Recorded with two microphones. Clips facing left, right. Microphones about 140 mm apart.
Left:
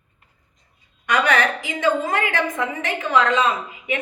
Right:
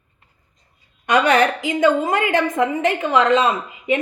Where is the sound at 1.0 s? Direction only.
50° right (ahead or behind).